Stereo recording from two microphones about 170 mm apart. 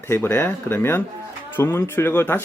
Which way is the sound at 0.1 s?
15° left (ahead or behind).